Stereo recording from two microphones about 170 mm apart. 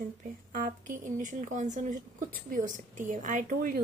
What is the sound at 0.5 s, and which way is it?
A woman's voice, 50° right (ahead or behind).